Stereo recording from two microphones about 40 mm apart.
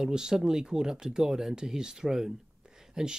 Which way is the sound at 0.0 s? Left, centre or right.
Centre.